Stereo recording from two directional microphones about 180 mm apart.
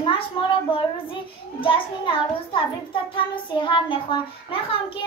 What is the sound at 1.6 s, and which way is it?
Speech, 30° left (ahead or behind).